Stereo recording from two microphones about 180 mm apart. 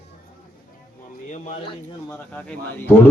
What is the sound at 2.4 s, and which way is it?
Speech, 10° left (ahead or behind).